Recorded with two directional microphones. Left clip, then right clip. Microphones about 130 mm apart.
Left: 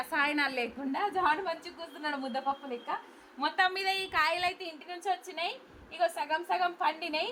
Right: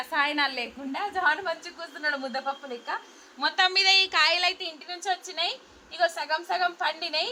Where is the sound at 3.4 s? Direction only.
25° right (ahead or behind).